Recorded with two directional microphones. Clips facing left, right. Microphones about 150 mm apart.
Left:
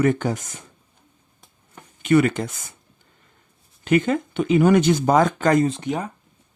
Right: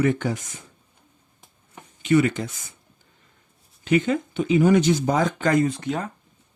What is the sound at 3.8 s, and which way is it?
Speech, 50° left (ahead or behind).